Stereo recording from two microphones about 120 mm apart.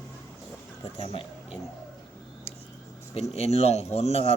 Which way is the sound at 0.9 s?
50° left (ahead or behind).